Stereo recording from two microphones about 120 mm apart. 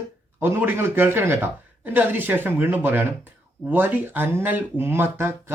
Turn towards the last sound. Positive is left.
turn(degrees=-20)  # may be behind; listen again after turning